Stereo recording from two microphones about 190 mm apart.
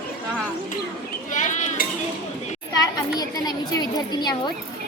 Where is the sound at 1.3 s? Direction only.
40° left (ahead or behind).